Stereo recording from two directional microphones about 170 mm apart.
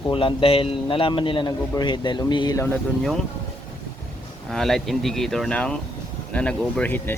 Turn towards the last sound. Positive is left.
turn(degrees=10)  # may be behind; listen again after turning